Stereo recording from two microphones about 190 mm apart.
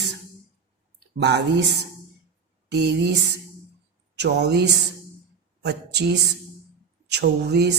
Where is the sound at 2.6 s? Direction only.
60° right (ahead or behind).